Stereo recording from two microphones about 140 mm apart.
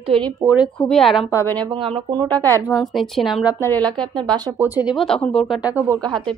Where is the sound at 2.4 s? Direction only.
25° right (ahead or behind).